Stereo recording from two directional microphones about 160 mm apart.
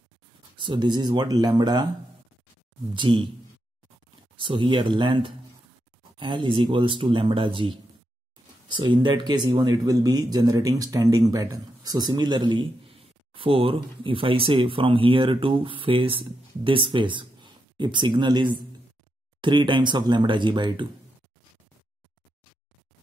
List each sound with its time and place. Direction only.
0.6 s speech: 30° right (ahead or behind)
2.9 s speech: 30° right (ahead or behind)
4.4 s speech: 30° right (ahead or behind)